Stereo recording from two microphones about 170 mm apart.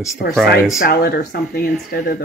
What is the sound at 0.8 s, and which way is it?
Speech, 65° left (ahead or behind).